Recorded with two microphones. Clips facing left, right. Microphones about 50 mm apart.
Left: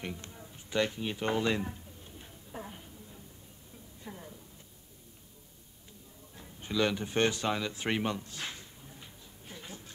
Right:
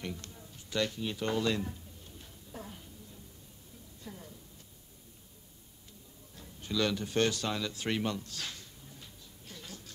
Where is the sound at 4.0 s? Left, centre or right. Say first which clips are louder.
Left 2 dB; left.